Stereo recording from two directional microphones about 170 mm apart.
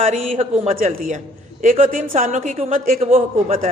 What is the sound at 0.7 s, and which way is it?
A woman's voice, 50° right (ahead or behind).